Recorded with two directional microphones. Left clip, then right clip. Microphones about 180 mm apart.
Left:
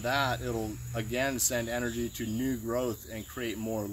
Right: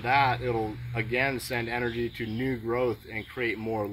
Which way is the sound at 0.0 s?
25° left (ahead or behind).